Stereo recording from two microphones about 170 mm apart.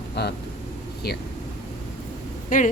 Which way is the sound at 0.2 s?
75° left (ahead or behind).